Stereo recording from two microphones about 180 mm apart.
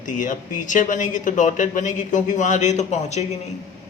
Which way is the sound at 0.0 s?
45° left (ahead or behind).